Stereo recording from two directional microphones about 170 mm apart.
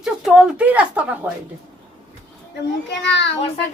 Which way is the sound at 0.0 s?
Centre (ahead or behind).